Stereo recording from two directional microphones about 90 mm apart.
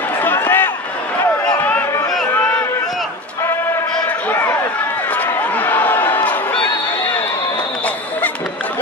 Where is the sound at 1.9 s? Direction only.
30° left (ahead or behind).